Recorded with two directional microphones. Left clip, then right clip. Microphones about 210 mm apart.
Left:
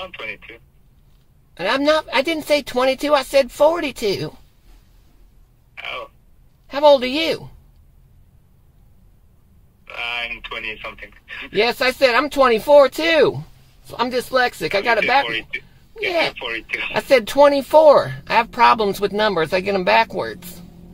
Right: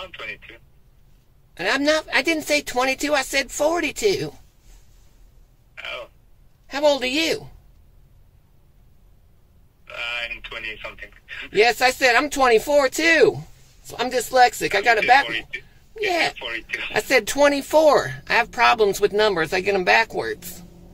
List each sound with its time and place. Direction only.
0.0 s speech: 15° left (ahead or behind)
1.6 s speech: centre (ahead or behind)
5.8 s throat clearing: 20° left (ahead or behind)
6.7 s speech: centre (ahead or behind)
9.8 s a man's voice: 20° left (ahead or behind)
11.5 s speech: centre (ahead or behind)
15.2 s speech: 20° left (ahead or behind)
16.9 s speech: 5° left (ahead or behind)